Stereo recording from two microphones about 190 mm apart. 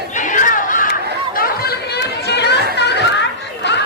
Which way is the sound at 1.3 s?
55° left (ahead or behind).